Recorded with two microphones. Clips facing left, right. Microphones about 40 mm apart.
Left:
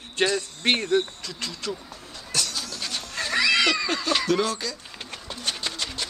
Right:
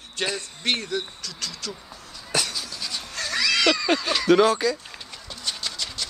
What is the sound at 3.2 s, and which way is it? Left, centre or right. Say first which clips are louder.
Cat: left 2 dB; left.